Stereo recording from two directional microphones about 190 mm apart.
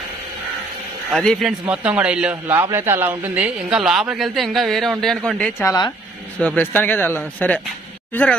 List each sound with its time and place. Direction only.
1.1 s a man's voice: 5° left (ahead or behind)
5.6 s speech: 15° left (ahead or behind)